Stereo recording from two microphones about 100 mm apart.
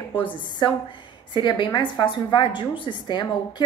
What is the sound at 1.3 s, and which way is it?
A woman's voice, 50° left (ahead or behind).